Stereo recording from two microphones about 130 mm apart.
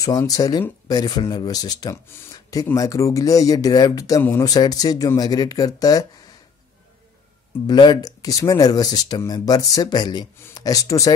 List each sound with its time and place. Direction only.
0.0 s speech: 30° left (ahead or behind)
7.6 s speech: 35° left (ahead or behind)